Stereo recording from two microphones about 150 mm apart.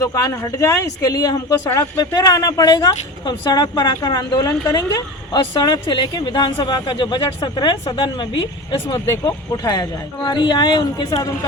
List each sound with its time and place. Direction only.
0.0 s speech: 20° left (ahead or behind)